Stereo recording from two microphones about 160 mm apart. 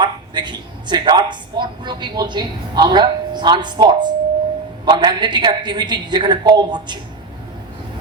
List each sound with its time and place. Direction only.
0.0 s a woman's voice: 30° right (ahead or behind)